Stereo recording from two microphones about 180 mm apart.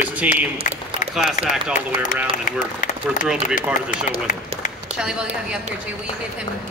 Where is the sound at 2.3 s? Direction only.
45° left (ahead or behind).